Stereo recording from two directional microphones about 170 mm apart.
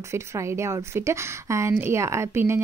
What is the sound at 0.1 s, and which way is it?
A woman's voice, 15° right (ahead or behind).